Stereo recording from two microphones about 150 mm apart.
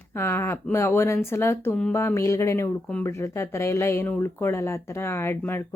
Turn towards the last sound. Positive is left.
turn(degrees=15)  # may be behind; listen again after turning